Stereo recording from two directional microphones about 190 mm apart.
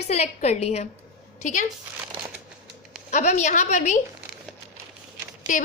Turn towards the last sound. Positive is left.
turn(degrees=45)  # may be behind; listen again after turning